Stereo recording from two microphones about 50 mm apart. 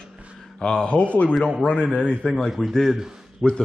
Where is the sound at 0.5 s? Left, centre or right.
Centre.